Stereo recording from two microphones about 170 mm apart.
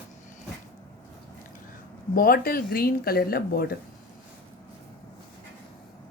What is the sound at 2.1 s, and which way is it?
Speech, 60° left (ahead or behind).